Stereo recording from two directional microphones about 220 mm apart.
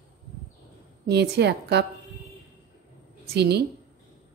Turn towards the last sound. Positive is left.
turn(degrees=-50)  # may be behind; listen again after turning